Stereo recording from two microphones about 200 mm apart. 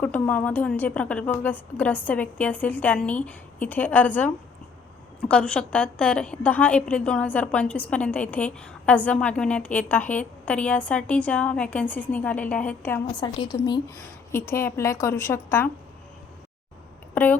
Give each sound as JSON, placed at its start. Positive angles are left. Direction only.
{"t": 0.0, "sound": "a woman's voice", "side_deg": 5}
{"t": 5.3, "sound": "a woman's voice", "side_deg": 5}
{"t": 13.1, "sound": "a woman's voice", "side_deg": 20}
{"t": 17.2, "sound": "a woman's voice", "side_deg": 10}